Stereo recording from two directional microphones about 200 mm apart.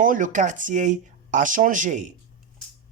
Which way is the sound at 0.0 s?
40° right (ahead or behind).